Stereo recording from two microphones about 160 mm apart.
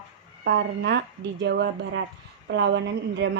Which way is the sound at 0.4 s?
90° right.